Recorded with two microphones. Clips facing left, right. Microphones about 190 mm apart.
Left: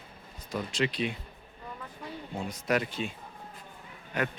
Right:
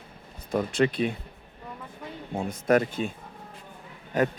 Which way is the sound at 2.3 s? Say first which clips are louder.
Right 7 dB; 50° right (ahead or behind).